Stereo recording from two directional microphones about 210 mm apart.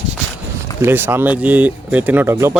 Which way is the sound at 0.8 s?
10° right (ahead or behind).